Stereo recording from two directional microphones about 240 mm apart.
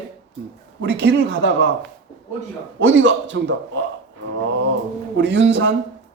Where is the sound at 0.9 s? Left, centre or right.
Right.